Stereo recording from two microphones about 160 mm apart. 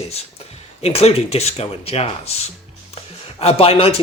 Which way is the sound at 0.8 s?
40° left (ahead or behind).